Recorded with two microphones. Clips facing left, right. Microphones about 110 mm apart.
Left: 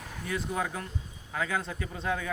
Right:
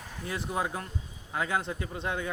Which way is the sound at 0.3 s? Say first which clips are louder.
Even; 25° right (ahead or behind).